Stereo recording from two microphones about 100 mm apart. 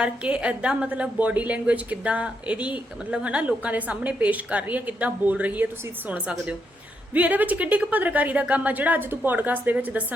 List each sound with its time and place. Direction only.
0.0 s a woman's voice: 10° right (ahead or behind)